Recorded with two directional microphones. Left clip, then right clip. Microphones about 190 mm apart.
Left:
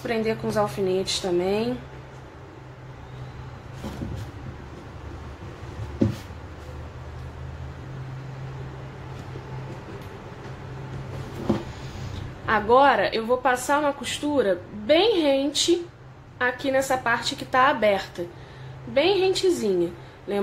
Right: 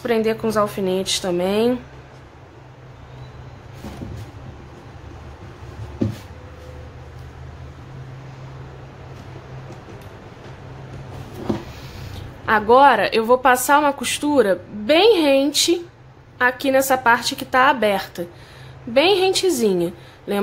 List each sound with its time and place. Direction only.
0.0 s a woman's voice: 30° right (ahead or behind)
12.4 s a woman's voice: 25° right (ahead or behind)